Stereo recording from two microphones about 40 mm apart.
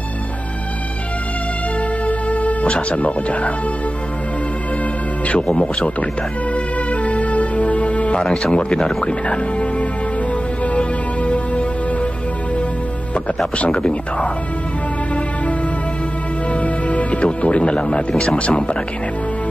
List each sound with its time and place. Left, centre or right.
2.0 s music: left
5.2 s speech: left
6.5 s music: left
8.4 s speech: left
10.6 s music: left
13.6 s speech: left
16.5 s speech: left